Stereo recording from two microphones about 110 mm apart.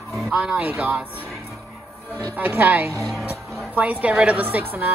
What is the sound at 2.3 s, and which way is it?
A woman's voice, 15° right (ahead or behind).